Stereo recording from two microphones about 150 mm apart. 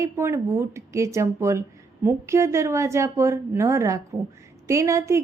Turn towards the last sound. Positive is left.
turn(degrees=-20)  # may be behind; listen again after turning